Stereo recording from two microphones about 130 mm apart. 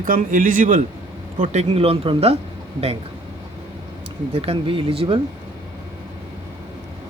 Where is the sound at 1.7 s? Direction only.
50° right (ahead or behind).